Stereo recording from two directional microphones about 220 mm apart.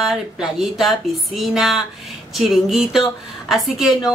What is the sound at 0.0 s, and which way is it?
A woman's voice, centre (ahead or behind).